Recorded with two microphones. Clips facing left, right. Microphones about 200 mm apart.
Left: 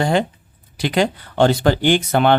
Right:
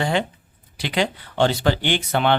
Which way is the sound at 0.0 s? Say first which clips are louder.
Left 4 dB; 40° left (ahead or behind).